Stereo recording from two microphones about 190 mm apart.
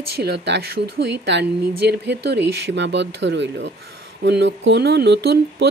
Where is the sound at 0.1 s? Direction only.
60° right (ahead or behind).